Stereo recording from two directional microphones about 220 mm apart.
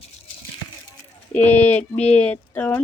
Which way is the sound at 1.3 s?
5° left (ahead or behind).